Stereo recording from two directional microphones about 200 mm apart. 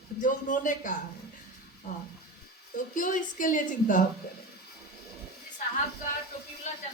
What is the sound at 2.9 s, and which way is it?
A woman's voice, 40° left (ahead or behind).